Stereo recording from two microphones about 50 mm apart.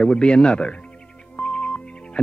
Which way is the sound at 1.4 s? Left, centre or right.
Centre.